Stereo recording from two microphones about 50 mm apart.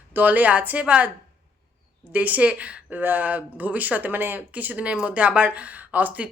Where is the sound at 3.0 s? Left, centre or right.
Right.